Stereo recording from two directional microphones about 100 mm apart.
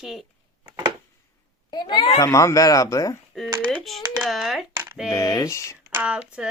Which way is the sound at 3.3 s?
Centre (ahead or behind).